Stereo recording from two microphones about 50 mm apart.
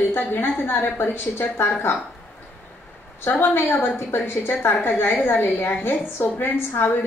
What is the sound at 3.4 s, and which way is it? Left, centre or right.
A woman's voice, left.